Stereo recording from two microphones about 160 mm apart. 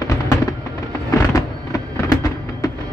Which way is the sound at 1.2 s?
20° left (ahead or behind).